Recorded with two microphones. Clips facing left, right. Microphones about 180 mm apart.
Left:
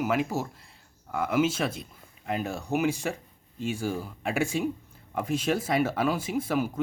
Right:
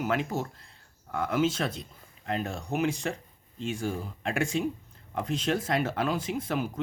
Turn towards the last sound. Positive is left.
turn(degrees=5)  # may be behind; listen again after turning